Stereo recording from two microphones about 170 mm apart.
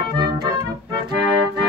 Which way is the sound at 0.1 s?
25° right (ahead or behind).